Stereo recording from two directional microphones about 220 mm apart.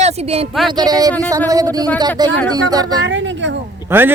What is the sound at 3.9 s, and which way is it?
Speech, 10° right (ahead or behind).